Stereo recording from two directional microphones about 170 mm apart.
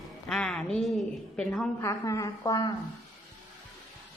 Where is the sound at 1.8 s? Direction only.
20° left (ahead or behind).